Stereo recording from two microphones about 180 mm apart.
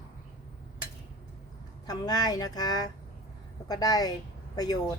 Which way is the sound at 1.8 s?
20° left (ahead or behind).